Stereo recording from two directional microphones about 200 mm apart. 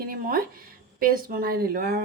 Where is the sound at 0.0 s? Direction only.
45° right (ahead or behind).